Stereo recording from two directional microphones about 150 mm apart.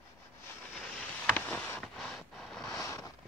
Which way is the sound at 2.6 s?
20° left (ahead or behind).